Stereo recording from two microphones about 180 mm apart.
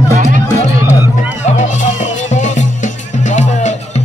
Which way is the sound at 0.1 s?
45° right (ahead or behind).